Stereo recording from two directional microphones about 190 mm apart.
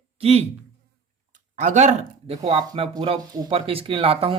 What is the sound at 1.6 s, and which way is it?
Speech, 40° right (ahead or behind).